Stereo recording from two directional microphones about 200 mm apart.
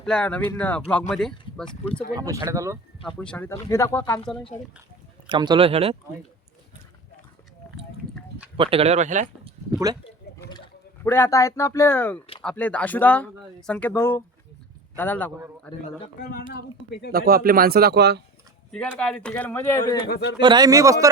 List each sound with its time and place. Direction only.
0.0 s speech: 5° left (ahead or behind)
2.1 s speech: 15° right (ahead or behind)
3.0 s speech: 5° left (ahead or behind)
5.3 s speech: 25° right (ahead or behind)
8.5 s speech: 25° right (ahead or behind)
9.9 s speech: 20° right (ahead or behind)
10.3 s a sound: 50° left (ahead or behind)
11.0 s speech: 10° left (ahead or behind)
16.5 s a woman's voice: 55° left (ahead or behind)
17.1 s speech: 50° right (ahead or behind)
18.7 s speech: 5° left (ahead or behind)
20.1 s a woman's voice: 60° left (ahead or behind)
20.4 s speech: 20° right (ahead or behind)